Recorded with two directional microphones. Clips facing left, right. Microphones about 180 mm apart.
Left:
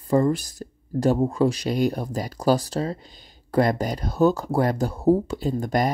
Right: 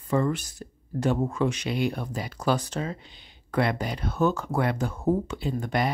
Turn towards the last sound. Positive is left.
turn(degrees=40)  # may be behind; listen again after turning